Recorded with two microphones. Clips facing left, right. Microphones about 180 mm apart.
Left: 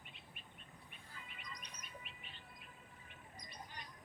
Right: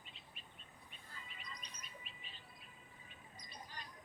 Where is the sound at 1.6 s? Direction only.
60° left (ahead or behind).